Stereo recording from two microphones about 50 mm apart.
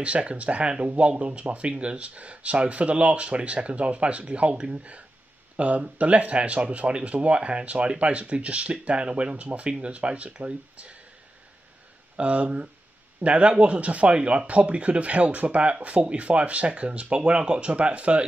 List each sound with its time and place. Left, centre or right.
0.0 s speech: right
12.2 s speech: right